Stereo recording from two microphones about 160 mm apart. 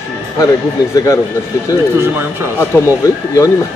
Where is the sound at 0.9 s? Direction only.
20° left (ahead or behind).